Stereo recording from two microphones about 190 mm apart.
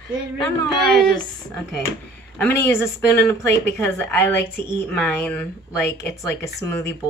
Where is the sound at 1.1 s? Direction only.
15° left (ahead or behind).